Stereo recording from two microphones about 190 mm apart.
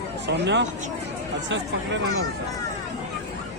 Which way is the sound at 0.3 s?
65° right (ahead or behind).